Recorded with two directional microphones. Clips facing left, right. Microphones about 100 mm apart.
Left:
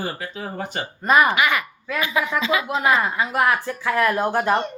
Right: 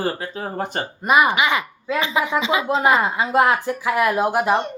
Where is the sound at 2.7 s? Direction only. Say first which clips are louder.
Right 4 dB; 30° right (ahead or behind).